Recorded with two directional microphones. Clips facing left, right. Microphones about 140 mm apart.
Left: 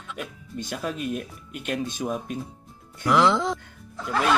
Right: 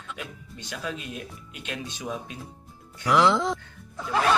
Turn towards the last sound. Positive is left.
turn(degrees=0)  # may be behind; listen again after turning